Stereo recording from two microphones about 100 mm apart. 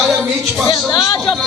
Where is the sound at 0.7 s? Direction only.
50° left (ahead or behind).